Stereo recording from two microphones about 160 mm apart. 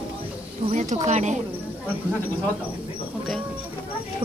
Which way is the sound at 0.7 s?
50° right (ahead or behind).